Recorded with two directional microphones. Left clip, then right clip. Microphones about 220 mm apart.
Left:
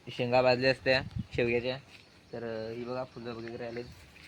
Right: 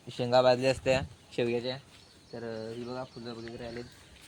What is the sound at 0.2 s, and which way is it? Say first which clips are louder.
Speech: right 2 dB; 20° right (ahead or behind).